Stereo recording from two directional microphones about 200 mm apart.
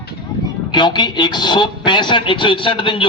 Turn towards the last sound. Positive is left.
turn(degrees=25)  # may be behind; listen again after turning